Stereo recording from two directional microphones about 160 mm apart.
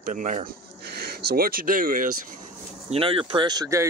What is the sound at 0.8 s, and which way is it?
Speech, 85° right.